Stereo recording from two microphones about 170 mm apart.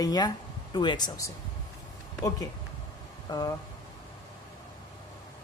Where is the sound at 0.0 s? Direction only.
20° left (ahead or behind).